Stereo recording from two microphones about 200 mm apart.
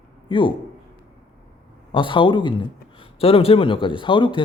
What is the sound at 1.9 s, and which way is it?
A man's voice, 25° left (ahead or behind).